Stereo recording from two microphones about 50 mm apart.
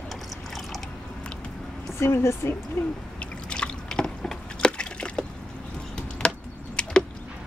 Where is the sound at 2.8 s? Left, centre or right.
Left.